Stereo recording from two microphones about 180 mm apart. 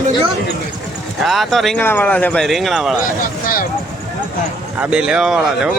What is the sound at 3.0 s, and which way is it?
Speech, 50° left (ahead or behind).